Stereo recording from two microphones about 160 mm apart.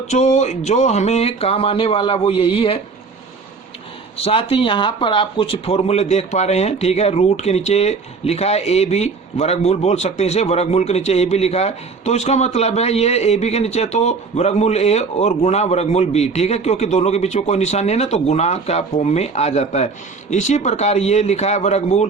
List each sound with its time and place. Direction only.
0.1 s speech: 45° left (ahead or behind)
4.2 s speech: 35° left (ahead or behind)